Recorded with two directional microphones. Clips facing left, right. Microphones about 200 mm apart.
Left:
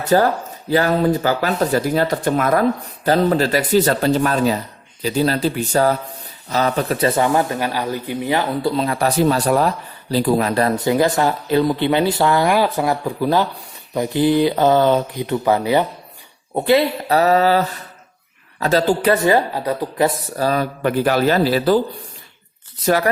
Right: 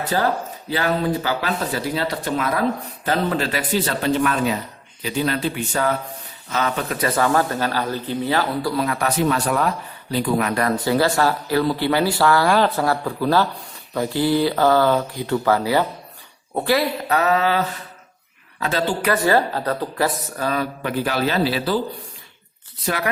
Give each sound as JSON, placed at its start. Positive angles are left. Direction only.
{"t": 0.1, "sound": "speech", "side_deg": 45}
{"t": 3.0, "sound": "speech", "side_deg": 40}
{"t": 7.3, "sound": "speech", "side_deg": 15}
{"t": 10.8, "sound": "speech", "side_deg": 20}
{"t": 17.2, "sound": "speech", "side_deg": 35}
{"t": 18.6, "sound": "speech", "side_deg": 40}
{"t": 19.1, "sound": "speech", "side_deg": 20}
{"t": 20.1, "sound": "speech", "side_deg": 30}